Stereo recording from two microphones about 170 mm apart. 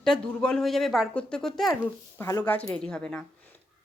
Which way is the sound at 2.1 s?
20° left (ahead or behind).